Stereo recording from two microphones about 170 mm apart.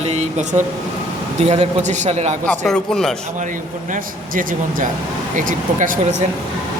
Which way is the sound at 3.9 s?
55° right (ahead or behind).